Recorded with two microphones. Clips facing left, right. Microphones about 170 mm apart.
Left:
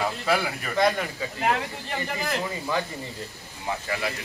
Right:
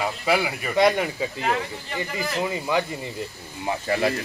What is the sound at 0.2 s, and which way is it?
Speech, 10° right (ahead or behind).